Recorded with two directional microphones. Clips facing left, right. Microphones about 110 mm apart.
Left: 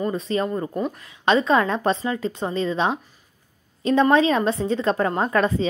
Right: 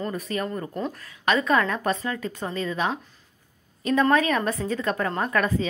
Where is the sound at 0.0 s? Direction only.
25° left (ahead or behind).